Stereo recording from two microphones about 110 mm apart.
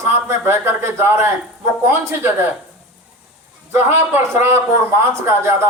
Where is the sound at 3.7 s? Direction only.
20° right (ahead or behind).